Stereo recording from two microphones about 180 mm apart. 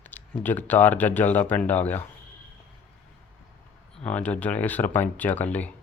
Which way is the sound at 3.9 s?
5° left (ahead or behind).